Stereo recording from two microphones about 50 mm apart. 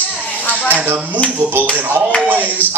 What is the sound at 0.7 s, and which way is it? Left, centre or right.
Speech, right.